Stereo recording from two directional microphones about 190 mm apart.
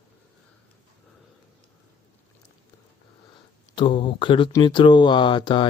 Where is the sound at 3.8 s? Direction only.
25° left (ahead or behind).